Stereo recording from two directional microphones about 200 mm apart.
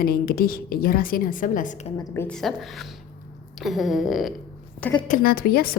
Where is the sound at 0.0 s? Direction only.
50° left (ahead or behind).